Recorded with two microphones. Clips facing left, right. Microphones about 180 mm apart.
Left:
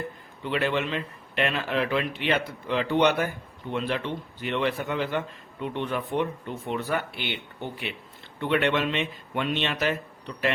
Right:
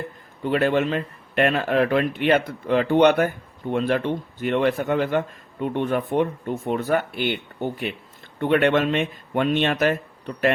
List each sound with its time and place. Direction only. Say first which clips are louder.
0.4 s speech: right 6 dB; 45° right (ahead or behind)